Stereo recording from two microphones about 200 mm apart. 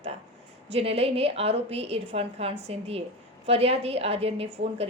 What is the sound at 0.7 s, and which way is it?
A woman's voice, 30° right (ahead or behind).